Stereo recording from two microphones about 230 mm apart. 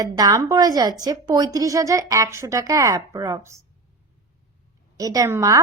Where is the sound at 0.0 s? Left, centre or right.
Centre.